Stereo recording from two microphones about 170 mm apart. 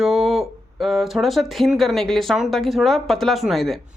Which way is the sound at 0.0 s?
Centre (ahead or behind).